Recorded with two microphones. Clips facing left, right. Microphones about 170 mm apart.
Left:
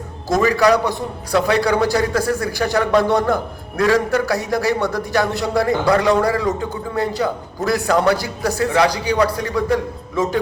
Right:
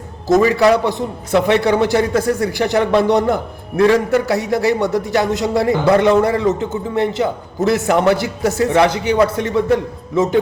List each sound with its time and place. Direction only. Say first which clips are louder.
0.3 s a man's voice: right 3 dB; 20° right (ahead or behind)